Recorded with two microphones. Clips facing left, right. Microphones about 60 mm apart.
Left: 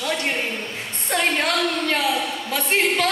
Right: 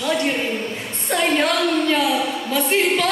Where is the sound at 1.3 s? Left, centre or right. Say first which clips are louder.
Right 3 dB; centre.